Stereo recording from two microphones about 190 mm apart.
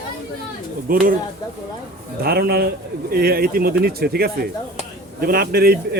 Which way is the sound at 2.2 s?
55° right (ahead or behind).